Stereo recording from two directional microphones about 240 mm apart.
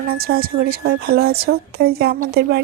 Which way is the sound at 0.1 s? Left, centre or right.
Right.